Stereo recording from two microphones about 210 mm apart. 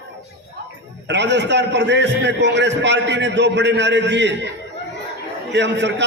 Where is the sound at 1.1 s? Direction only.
55° right (ahead or behind).